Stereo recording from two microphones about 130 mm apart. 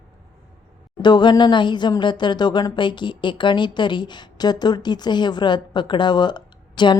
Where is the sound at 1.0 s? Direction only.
35° left (ahead or behind).